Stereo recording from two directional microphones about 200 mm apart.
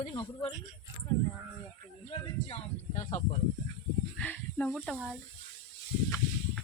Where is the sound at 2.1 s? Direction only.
30° left (ahead or behind).